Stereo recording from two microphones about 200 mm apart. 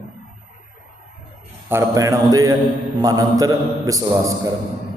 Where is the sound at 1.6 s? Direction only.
15° right (ahead or behind).